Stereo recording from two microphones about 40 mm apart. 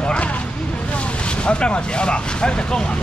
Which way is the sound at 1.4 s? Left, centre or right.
Left.